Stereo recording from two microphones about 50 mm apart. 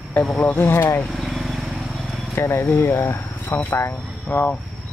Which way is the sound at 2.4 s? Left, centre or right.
Left.